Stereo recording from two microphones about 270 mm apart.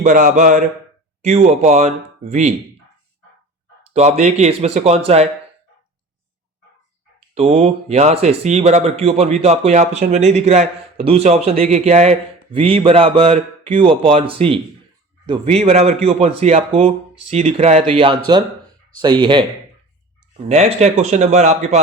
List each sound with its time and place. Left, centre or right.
0.0 s speech: right
3.9 s speech: right
7.3 s speech: right